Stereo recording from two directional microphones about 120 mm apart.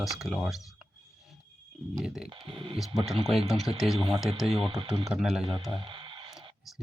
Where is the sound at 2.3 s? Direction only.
45° right (ahead or behind).